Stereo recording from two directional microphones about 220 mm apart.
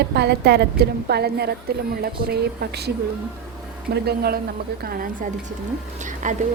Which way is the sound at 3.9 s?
45° right (ahead or behind).